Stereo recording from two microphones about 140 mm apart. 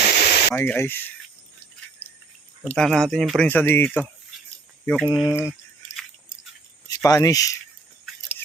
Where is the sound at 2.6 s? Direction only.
5° left (ahead or behind).